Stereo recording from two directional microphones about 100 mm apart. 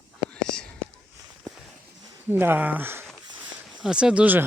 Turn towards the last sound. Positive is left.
turn(degrees=-15)  # may be behind; listen again after turning